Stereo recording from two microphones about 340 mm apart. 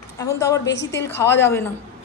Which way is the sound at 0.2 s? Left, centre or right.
Centre.